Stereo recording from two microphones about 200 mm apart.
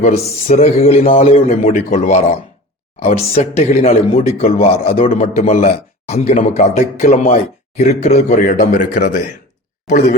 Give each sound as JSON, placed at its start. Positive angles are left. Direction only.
{"t": 0.0, "sound": "speech", "side_deg": 35}
{"t": 7.8, "sound": "a man's voice", "side_deg": 45}